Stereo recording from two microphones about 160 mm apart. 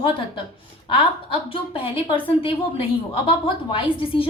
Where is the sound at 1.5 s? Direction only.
35° left (ahead or behind).